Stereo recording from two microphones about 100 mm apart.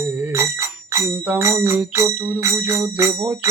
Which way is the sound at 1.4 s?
30° right (ahead or behind).